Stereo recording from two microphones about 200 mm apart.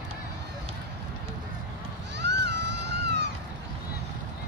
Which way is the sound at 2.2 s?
60° right (ahead or behind).